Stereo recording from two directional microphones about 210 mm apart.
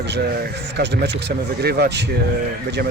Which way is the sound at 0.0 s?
55° right (ahead or behind).